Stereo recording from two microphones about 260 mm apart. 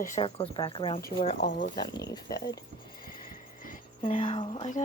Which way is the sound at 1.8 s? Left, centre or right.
Centre.